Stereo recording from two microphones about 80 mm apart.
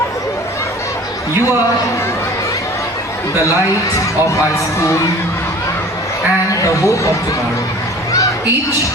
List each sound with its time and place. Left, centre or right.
6.6 s speech: left